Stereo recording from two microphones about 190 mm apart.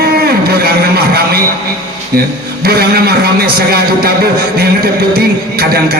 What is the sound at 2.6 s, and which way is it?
Music, 55° right (ahead or behind).